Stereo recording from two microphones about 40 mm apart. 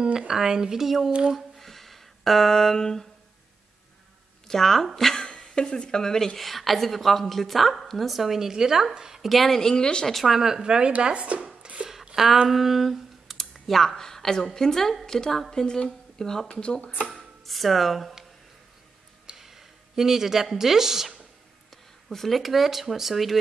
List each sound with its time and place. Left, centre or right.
0.3 s a woman's voice: centre
1.3 s a sound: centre
4.5 s speech: centre
5.2 s a woman's voice: centre
9.3 s speech: centre
10.0 s a woman's voice: centre
10.3 s a woman's voice: centre
12.4 s speech: centre; by 16.8 s left
17.1 s a sound: centre
19.3 s speech: centre
22.1 s a woman's voice: centre